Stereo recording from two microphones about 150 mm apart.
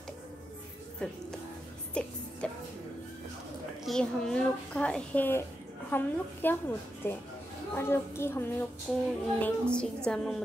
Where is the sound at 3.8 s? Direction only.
5° left (ahead or behind).